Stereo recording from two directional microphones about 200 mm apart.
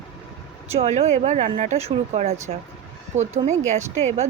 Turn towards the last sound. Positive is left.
turn(degrees=-35)  # may be behind; listen again after turning